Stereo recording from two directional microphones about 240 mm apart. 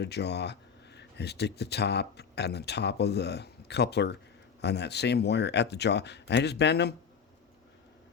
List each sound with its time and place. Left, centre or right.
0.0 s speech: left